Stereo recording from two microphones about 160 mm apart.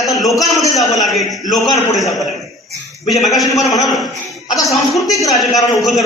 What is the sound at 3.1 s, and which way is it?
A man's voice, centre (ahead or behind).